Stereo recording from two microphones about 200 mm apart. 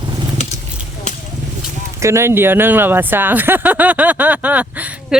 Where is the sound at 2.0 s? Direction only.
15° right (ahead or behind).